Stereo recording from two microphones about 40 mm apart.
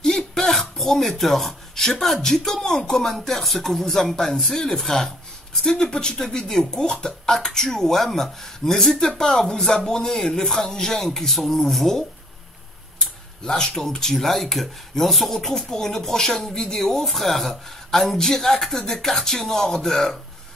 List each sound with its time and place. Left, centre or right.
0.0 s a sound: centre
2.2 s speech: centre
5.7 s speech: centre
13.5 s speech: centre